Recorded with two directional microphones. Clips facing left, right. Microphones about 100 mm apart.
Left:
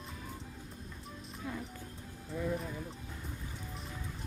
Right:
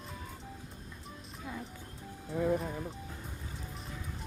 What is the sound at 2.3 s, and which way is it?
Speech, 55° right (ahead or behind).